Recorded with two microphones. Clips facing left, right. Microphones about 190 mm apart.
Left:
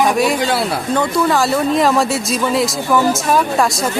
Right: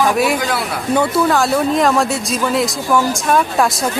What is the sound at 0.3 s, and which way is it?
Speech, 25° left (ahead or behind).